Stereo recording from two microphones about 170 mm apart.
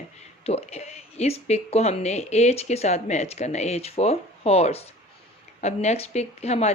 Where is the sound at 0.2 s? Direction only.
40° left (ahead or behind).